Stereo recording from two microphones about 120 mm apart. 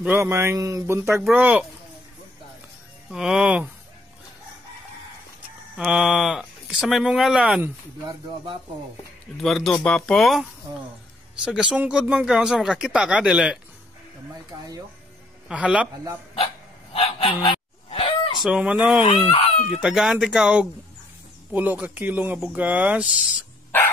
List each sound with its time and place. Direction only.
0.0 s speech: 20° right (ahead or behind)
3.1 s speech: 5° right (ahead or behind)
5.8 s speech: 5° right (ahead or behind)
9.4 s speech: centre (ahead or behind)
11.4 s speech: 5° right (ahead or behind)
14.5 s speech: 35° right (ahead or behind)
15.4 s speech: 10° right (ahead or behind)
16.9 s goose: 50° left (ahead or behind)
18.4 s speech: 10° right (ahead or behind)